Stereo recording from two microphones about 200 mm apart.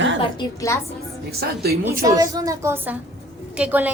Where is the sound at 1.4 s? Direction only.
50° right (ahead or behind).